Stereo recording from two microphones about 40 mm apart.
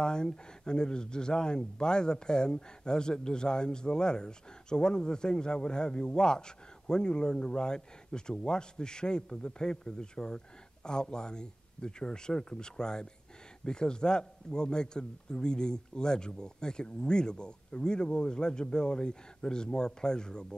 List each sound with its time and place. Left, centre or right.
0.0 s speech: centre